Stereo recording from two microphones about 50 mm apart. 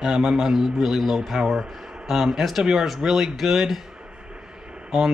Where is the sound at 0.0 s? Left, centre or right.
Centre.